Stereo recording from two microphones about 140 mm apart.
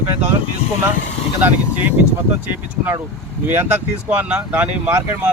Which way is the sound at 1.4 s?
10° right (ahead or behind).